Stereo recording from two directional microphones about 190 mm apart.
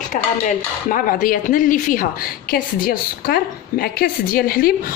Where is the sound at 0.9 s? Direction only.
45° left (ahead or behind).